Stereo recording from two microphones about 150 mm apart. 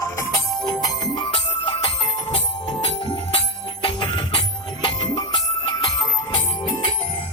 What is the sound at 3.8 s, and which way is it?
Music, 35° left (ahead or behind).